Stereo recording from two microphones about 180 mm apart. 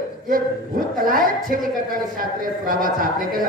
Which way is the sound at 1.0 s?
50° right (ahead or behind).